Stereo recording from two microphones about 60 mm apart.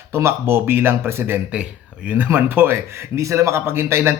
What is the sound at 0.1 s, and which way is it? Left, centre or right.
Speech, right.